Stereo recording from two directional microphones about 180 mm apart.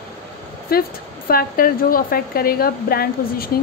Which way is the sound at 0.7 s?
60° left (ahead or behind).